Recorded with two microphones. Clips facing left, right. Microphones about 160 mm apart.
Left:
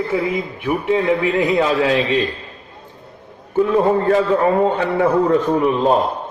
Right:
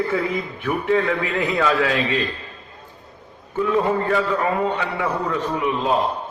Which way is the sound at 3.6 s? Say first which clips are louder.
Left 4 dB; 35° left (ahead or behind).